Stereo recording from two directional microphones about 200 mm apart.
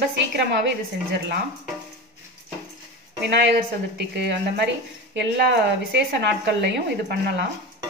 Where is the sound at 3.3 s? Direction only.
60° right (ahead or behind).